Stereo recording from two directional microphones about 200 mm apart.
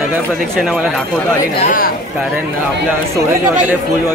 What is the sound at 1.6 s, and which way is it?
Speech, 45° left (ahead or behind).